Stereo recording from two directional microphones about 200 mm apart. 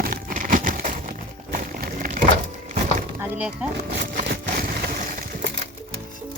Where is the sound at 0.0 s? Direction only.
45° right (ahead or behind).